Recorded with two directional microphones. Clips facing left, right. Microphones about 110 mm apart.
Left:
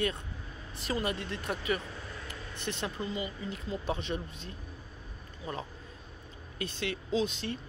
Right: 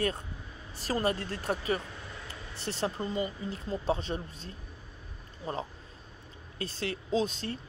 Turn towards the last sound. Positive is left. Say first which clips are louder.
# right 1 dB
turn(degrees=-40)  # may be behind; listen again after turning